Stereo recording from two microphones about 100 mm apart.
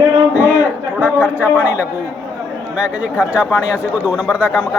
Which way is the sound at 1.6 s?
15° right (ahead or behind).